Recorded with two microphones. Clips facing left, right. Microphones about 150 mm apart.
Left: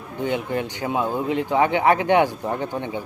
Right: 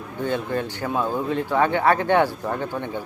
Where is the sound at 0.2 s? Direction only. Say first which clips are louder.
Left 1 dB; 15° left (ahead or behind).